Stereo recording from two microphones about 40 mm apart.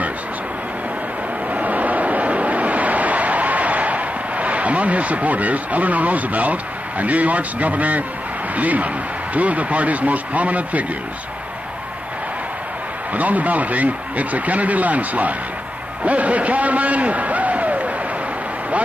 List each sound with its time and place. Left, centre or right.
1.5 s vehicle: right
8.5 s speech: right
13.1 s a man's voice: right